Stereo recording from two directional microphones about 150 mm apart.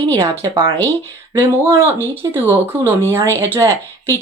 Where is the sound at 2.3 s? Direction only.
15° right (ahead or behind).